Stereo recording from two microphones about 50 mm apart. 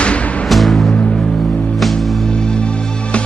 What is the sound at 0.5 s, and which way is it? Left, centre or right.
Music, centre.